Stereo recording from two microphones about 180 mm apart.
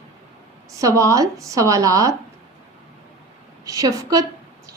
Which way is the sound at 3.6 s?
20° right (ahead or behind).